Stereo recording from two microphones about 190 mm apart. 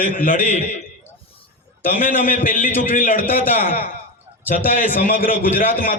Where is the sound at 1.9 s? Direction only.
45° left (ahead or behind).